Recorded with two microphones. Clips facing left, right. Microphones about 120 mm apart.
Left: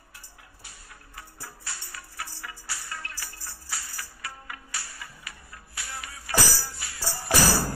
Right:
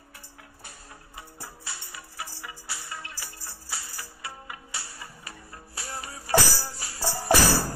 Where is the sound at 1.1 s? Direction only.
20° right (ahead or behind).